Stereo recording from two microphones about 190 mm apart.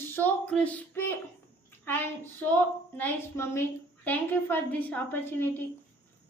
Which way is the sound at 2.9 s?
10° left (ahead or behind).